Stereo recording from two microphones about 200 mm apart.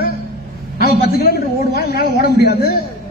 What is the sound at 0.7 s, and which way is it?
A man's voice, 50° left (ahead or behind).